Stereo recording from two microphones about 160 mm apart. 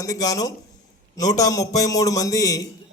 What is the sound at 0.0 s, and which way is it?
A man's voice, 20° left (ahead or behind).